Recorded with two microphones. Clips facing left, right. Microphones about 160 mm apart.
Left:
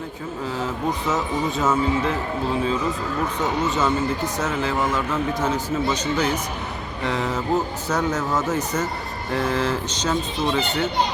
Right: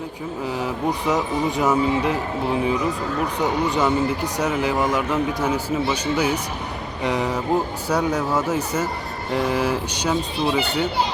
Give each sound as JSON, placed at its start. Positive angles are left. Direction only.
{"t": 0.4, "sound": "speech", "side_deg": -15}
{"t": 3.4, "sound": "speech", "side_deg": -15}